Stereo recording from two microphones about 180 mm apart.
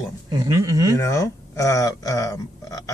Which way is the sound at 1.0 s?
15° left (ahead or behind).